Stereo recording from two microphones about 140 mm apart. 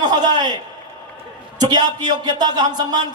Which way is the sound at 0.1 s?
30° right (ahead or behind).